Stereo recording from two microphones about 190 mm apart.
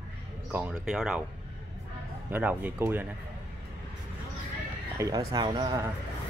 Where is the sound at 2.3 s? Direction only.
10° right (ahead or behind).